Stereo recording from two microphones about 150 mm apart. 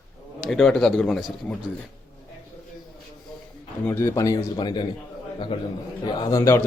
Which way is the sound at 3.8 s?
15° left (ahead or behind).